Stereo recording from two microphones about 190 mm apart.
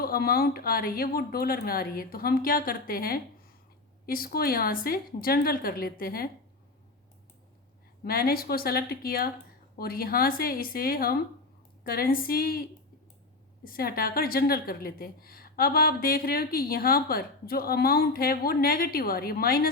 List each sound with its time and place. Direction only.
0.0 s a woman's voice: 50° left (ahead or behind)
8.0 s a woman's voice: 50° left (ahead or behind)
13.7 s a woman's voice: 50° left (ahead or behind)